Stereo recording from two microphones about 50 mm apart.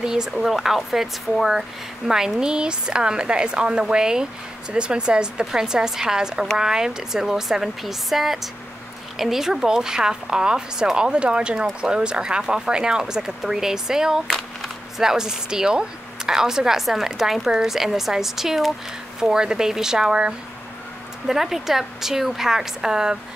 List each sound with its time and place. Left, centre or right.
0.0 s speech: centre